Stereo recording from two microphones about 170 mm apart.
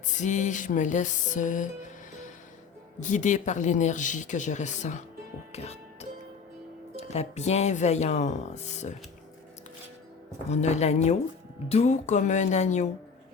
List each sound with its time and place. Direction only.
0.2 s speech: 45° left (ahead or behind)
3.0 s speech: 45° left (ahead or behind)
5.5 s music: 40° left (ahead or behind)
6.9 s speech: 40° left (ahead or behind)
10.5 s speech: 40° left (ahead or behind)